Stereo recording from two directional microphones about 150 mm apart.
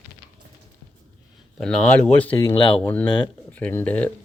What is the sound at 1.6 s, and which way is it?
Speech, 5° left (ahead or behind).